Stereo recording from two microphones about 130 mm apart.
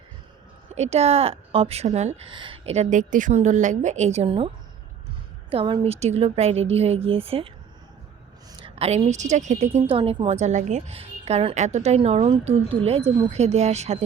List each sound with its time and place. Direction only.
0.8 s a woman's voice: 55° right (ahead or behind)
2.2 s a woman's voice: 40° right (ahead or behind)
5.5 s a woman's voice: 40° right (ahead or behind)
5.8 s a woman's voice: 55° right (ahead or behind)
8.5 s a woman's voice: 45° right (ahead or behind); by 9.8 s 65° right (ahead or behind)
9.9 s a woman's voice: 40° right (ahead or behind); by 14.0 s 55° right (ahead or behind)